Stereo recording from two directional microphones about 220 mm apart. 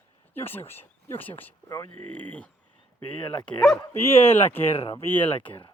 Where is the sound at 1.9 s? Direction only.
90° left.